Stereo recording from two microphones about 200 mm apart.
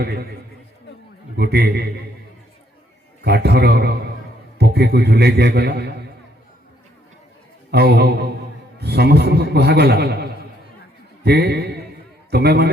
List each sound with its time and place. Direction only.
0.0 s a man's voice: 50° right (ahead or behind)
1.4 s a man's voice: 55° right (ahead or behind)
3.2 s a man's voice: 55° right (ahead or behind)
7.7 s a man's voice: 55° right (ahead or behind)